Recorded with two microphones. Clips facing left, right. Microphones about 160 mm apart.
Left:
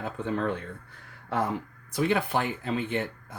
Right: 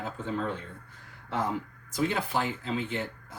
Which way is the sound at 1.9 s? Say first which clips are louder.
Left 3 dB; 60° left (ahead or behind).